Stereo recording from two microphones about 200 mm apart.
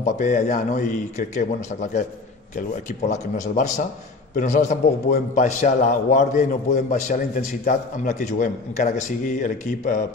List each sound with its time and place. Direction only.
0.0 s a man's voice: 40° left (ahead or behind)